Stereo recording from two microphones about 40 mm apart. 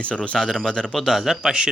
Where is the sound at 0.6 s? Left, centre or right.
Centre.